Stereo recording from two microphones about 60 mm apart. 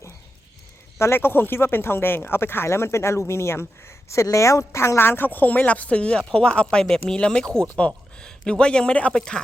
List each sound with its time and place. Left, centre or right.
0.9 s speech: left; by 9.4 s centre